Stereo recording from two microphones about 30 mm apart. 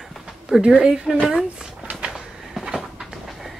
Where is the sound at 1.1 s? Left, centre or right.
Centre.